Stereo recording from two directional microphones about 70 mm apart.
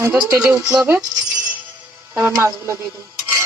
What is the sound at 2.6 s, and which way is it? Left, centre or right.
Speech, right.